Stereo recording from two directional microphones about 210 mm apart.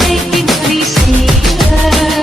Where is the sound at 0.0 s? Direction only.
Centre (ahead or behind).